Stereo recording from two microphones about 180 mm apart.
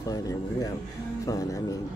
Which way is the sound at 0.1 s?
20° left (ahead or behind).